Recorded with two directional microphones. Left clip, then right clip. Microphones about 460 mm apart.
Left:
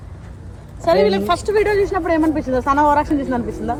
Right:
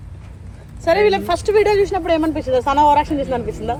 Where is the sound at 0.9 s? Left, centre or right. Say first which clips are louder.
Even; centre.